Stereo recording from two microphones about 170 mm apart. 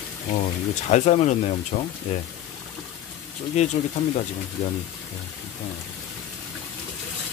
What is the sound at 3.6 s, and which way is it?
Speech, 40° left (ahead or behind).